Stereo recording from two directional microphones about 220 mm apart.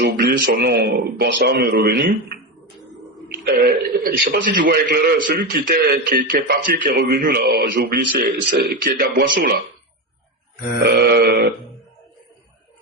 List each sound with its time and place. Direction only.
0.0 s a man's voice: 50° right (ahead or behind)
3.4 s a man's voice: 45° right (ahead or behind)
10.8 s a man's voice: 45° right (ahead or behind)